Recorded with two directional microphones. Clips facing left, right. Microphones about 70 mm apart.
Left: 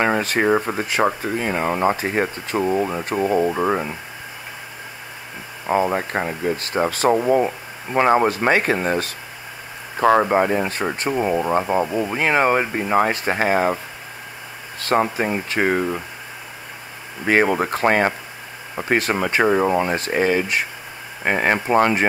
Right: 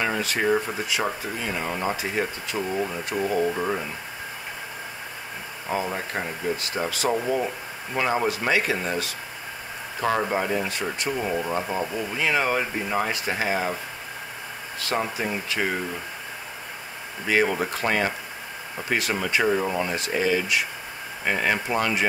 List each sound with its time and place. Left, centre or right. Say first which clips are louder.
0.0 s speech: left 6 dB; left
5.7 s speech: left 8 dB; left
14.8 s speech: left 8 dB; left
17.3 s speech: left 5 dB; left